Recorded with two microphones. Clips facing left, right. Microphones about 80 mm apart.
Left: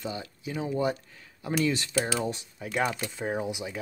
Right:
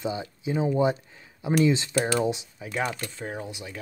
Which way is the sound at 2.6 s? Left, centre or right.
Centre.